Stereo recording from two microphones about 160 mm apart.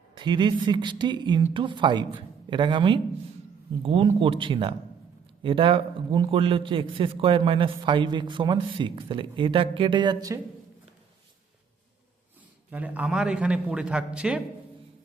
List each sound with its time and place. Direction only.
0.1 s a man's voice: 30° right (ahead or behind)
12.7 s a man's voice: 10° right (ahead or behind)